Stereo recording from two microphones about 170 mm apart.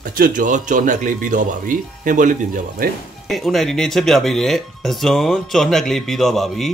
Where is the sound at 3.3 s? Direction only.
Centre (ahead or behind).